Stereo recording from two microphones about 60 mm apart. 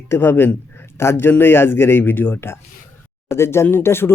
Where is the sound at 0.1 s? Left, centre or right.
Left.